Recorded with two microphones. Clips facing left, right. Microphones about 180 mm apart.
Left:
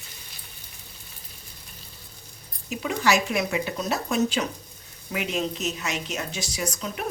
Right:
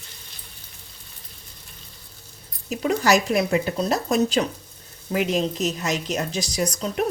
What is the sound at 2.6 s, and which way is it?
A woman's voice, 40° right (ahead or behind).